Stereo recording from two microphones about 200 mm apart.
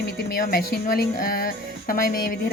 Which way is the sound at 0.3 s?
45° left (ahead or behind).